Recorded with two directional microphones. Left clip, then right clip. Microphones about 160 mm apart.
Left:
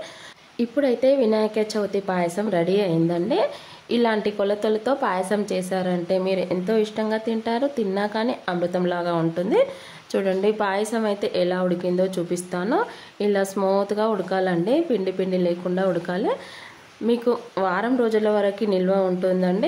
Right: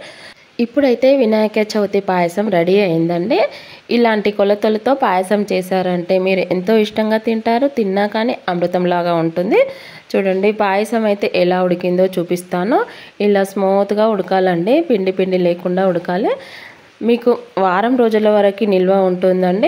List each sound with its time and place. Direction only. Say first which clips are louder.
0.6 s a woman's voice: right 7 dB; 30° right (ahead or behind)